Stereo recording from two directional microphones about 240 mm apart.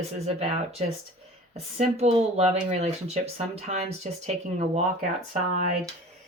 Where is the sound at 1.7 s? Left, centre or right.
Right.